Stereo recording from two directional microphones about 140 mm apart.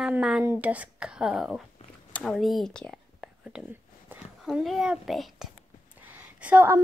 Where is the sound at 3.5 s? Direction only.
15° right (ahead or behind).